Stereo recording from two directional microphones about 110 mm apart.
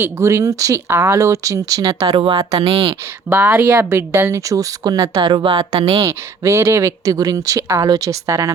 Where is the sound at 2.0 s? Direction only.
55° right (ahead or behind).